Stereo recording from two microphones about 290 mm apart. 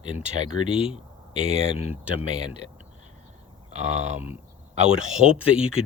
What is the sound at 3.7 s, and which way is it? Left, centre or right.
Speech, right.